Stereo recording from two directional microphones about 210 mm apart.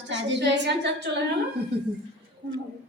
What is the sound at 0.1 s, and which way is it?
Speech, 55° right (ahead or behind).